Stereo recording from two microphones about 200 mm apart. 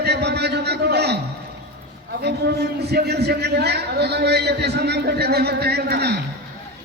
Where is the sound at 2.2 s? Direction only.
55° right (ahead or behind).